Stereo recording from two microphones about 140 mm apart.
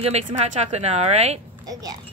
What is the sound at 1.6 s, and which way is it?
Speech, 25° right (ahead or behind).